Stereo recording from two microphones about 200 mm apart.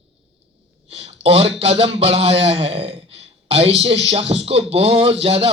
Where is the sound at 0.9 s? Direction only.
30° right (ahead or behind).